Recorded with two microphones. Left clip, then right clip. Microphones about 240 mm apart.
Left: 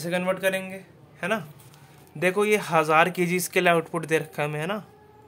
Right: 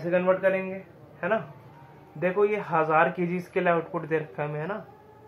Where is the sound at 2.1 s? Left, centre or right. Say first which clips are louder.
Left 2 dB; left.